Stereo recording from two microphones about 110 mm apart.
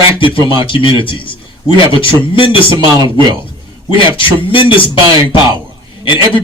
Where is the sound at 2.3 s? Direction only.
50° left (ahead or behind).